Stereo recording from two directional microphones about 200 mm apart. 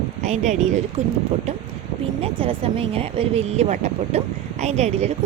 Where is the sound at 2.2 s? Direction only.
25° right (ahead or behind).